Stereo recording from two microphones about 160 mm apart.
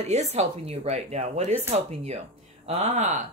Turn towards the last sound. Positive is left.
turn(degrees=-45)  # may be behind; listen again after turning